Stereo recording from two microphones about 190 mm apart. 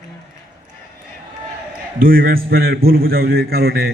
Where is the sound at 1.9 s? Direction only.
50° right (ahead or behind).